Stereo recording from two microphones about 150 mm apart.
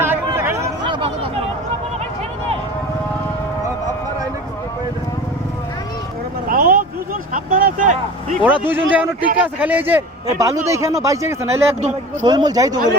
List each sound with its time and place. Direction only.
0.0 s a sound: 15° right (ahead or behind)
0.9 s chatter: 35° right (ahead or behind)
6.5 s vehicle: 70° right (ahead or behind)
8.4 s speech: 10° right (ahead or behind)